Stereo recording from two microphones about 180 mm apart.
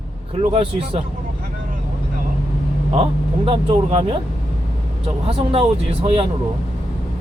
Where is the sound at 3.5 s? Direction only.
30° right (ahead or behind).